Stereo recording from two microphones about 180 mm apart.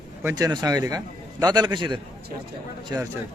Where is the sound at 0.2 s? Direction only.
15° right (ahead or behind).